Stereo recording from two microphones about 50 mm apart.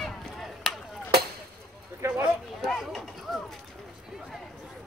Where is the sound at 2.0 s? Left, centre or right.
Right.